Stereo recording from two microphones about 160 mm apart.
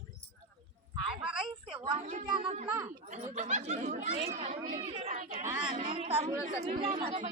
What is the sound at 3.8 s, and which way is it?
Speech, 60° right (ahead or behind).